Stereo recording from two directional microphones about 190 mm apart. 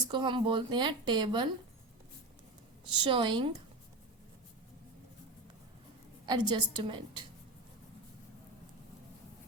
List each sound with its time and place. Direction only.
0.1 s a woman's voice: 25° right (ahead or behind)
2.9 s a woman's voice: 25° right (ahead or behind)
6.2 s a woman's voice: 25° right (ahead or behind)